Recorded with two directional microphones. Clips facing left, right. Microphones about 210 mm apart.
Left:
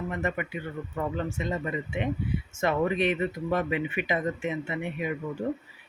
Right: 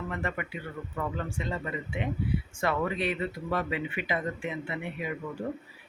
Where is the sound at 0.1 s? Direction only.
20° left (ahead or behind).